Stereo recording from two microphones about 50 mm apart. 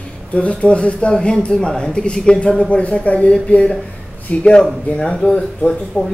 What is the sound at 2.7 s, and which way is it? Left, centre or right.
Speech, left.